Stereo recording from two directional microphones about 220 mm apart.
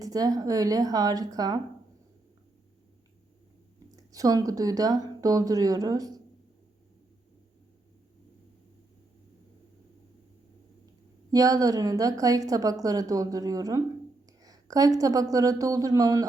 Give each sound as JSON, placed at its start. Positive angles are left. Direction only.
{"t": 0.0, "sound": "a woman's voice", "side_deg": -15}
{"t": 3.9, "sound": "speech", "side_deg": -15}
{"t": 11.3, "sound": "a woman's voice", "side_deg": -15}